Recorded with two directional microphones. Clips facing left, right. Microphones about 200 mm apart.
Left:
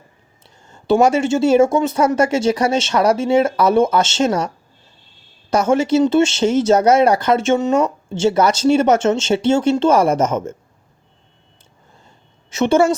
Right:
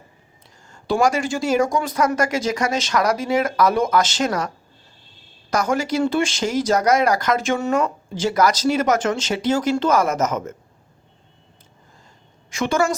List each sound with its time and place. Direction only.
0.7 s speech: 30° left (ahead or behind)
12.5 s speech: 30° left (ahead or behind)